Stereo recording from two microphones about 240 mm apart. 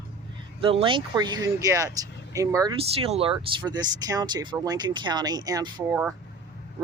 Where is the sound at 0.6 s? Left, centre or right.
Right.